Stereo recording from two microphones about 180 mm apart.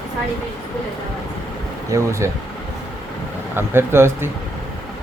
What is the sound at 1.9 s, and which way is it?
Speech, 15° right (ahead or behind).